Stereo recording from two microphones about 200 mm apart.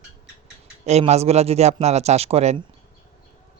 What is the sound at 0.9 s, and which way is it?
Speech, 30° right (ahead or behind).